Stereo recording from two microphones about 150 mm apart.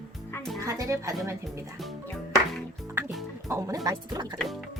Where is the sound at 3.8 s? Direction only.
20° right (ahead or behind).